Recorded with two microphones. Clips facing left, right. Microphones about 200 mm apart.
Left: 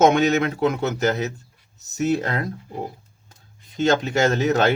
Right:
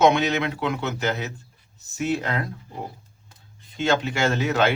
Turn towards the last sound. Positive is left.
turn(degrees=40)  # may be behind; listen again after turning